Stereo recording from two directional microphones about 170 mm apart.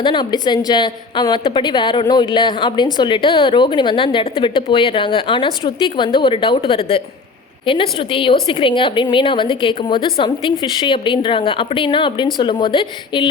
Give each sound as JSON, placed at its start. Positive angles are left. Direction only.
{"t": 0.0, "sound": "a woman's voice", "side_deg": 25}